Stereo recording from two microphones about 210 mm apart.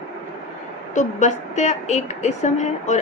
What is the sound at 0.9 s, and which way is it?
A woman's voice, 35° left (ahead or behind).